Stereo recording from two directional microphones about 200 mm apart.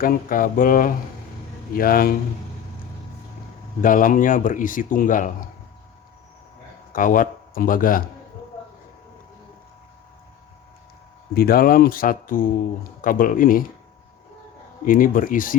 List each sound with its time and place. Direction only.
0.0 s speech: 45° left (ahead or behind)
3.8 s speech: 40° left (ahead or behind)
6.9 s speech: 40° left (ahead or behind)
11.3 s speech: 50° left (ahead or behind)
14.8 s speech: 45° left (ahead or behind)